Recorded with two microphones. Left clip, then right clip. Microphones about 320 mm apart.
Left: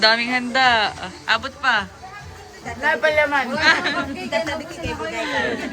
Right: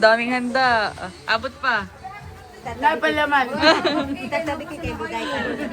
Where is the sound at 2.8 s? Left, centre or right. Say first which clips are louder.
Left 1 dB; right.